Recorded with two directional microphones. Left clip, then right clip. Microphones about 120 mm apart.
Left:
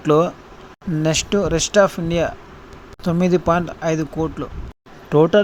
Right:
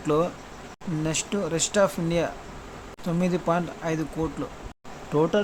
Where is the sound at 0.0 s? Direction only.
45° left (ahead or behind); by 2.3 s 30° left (ahead or behind).